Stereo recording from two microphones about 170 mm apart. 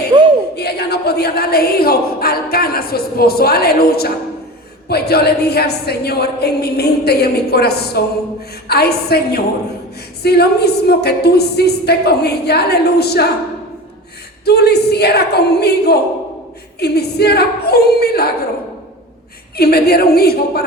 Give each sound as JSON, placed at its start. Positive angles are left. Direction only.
{"t": 0.1, "sound": "a sound", "side_deg": -30}
{"t": 0.5, "sound": "a woman's voice", "side_deg": 70}
{"t": 14.4, "sound": "a woman's voice", "side_deg": 75}
{"t": 19.5, "sound": "a woman's voice", "side_deg": 70}